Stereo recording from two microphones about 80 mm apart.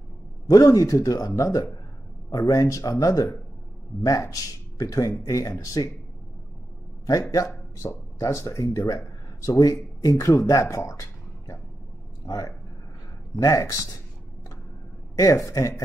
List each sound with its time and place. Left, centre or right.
0.5 s speech: left
7.1 s speech: left
15.1 s speech: left